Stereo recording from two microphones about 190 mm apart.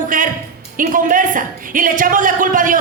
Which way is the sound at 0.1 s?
45° right (ahead or behind).